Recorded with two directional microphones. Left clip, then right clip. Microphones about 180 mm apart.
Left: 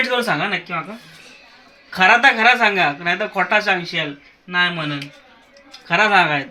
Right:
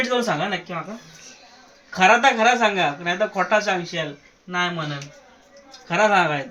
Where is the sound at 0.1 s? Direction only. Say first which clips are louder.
Left 3 dB; 10° left (ahead or behind).